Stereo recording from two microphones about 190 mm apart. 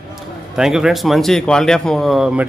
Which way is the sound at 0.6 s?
5° right (ahead or behind).